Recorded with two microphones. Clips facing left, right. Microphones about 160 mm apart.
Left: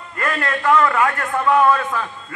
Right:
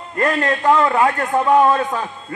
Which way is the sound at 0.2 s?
35° right (ahead or behind).